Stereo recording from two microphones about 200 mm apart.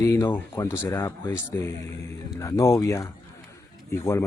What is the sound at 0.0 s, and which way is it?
Speech, 15° left (ahead or behind).